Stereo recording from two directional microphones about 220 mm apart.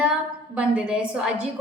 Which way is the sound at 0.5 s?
5° right (ahead or behind).